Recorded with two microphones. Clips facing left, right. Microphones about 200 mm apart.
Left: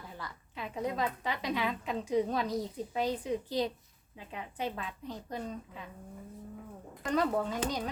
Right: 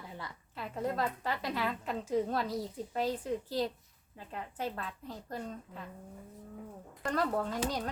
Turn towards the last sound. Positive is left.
turn(degrees=0)  # may be behind; listen again after turning